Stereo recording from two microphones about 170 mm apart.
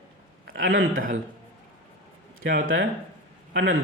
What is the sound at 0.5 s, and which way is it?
Speech, 55° right (ahead or behind).